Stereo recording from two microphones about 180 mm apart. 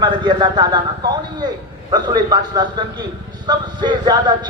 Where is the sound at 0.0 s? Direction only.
25° right (ahead or behind).